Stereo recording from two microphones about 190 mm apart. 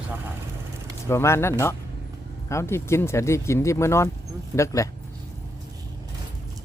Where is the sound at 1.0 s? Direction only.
15° left (ahead or behind).